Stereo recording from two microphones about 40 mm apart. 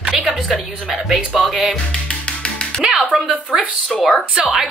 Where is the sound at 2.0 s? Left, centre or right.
Left.